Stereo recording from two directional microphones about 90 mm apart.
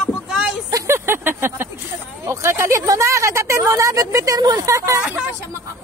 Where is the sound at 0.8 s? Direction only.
25° right (ahead or behind).